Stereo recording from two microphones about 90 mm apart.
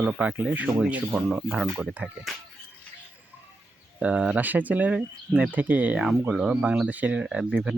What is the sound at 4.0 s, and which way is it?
Speech, 15° right (ahead or behind).